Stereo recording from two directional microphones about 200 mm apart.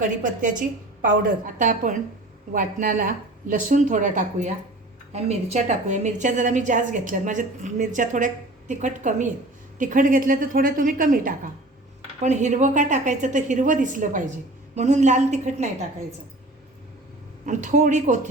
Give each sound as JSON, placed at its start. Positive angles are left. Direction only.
{"t": 0.0, "sound": "a woman's voice", "side_deg": -40}
{"t": 17.4, "sound": "a woman's voice", "side_deg": -40}